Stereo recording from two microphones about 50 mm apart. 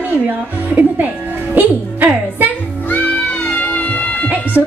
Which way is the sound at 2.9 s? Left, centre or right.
Left.